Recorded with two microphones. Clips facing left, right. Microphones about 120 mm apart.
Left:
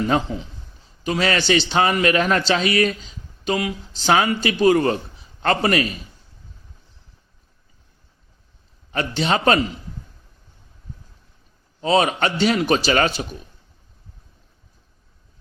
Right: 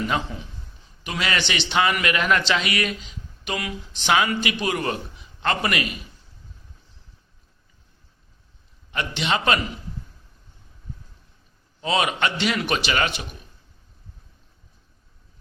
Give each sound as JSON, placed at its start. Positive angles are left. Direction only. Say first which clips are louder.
{"t": 0.1, "sound": "a man's voice", "louder": "left 5 dB", "side_deg": 25}
{"t": 8.9, "sound": "a man's voice", "louder": "left 4 dB", "side_deg": 40}
{"t": 11.8, "sound": "a man's voice", "louder": "left 5 dB", "side_deg": 35}